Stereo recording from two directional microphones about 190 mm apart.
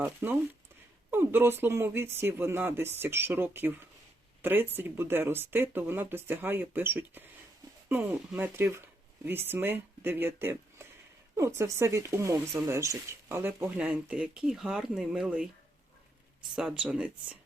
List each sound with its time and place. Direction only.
0.0 s speech: 10° right (ahead or behind)
16.6 s speech: 5° right (ahead or behind)